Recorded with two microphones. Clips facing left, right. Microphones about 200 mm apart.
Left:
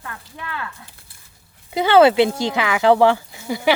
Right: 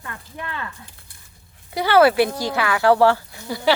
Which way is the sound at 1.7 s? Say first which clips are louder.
Left 2 dB; 20° left (ahead or behind).